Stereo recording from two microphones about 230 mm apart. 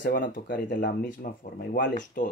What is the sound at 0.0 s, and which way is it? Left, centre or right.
Speech, left.